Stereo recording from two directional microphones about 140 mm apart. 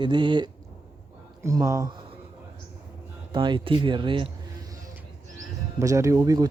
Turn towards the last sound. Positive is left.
turn(degrees=-25)  # may be behind; listen again after turning